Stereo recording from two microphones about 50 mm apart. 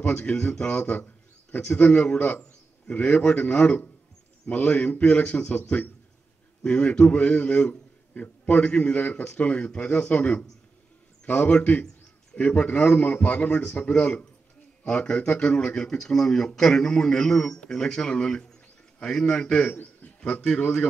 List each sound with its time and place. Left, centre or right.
0.0 s a man's voice: left; by 19.7 s centre
19.7 s a sound: left
20.4 s a man's voice: centre